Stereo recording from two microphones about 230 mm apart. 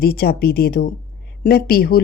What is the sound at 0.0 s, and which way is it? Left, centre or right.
A woman's voice, left.